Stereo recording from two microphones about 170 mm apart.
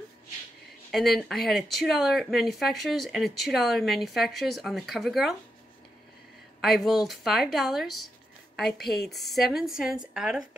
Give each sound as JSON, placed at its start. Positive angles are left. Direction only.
{"t": 0.9, "sound": "speech", "side_deg": 0}
{"t": 6.6, "sound": "speech", "side_deg": 0}